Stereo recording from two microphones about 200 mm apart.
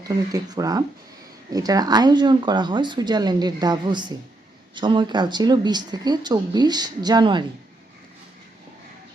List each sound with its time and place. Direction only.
0.0 s speech: 20° right (ahead or behind)